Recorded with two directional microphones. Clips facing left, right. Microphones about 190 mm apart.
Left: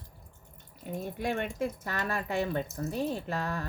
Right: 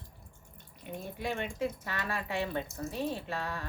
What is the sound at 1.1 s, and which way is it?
Speech, 50° left (ahead or behind).